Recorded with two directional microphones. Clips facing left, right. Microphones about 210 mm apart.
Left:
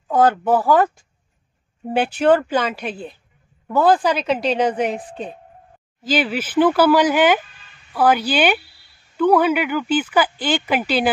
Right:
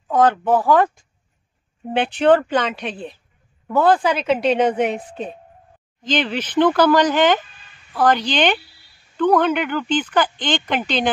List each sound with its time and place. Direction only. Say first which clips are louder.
0.1 s a woman's voice: even; 5° left (ahead or behind)
1.9 s a woman's voice: even; 5° left (ahead or behind)
6.0 s speech: left 1 dB; 5° left (ahead or behind)